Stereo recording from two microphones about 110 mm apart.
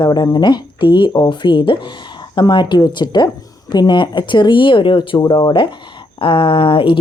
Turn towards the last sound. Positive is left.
turn(degrees=55)  # may be behind; listen again after turning